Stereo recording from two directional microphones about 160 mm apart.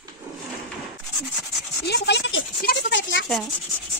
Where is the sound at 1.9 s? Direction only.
90° left.